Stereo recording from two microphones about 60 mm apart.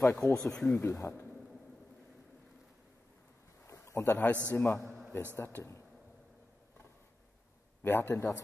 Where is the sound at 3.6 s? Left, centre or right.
Left.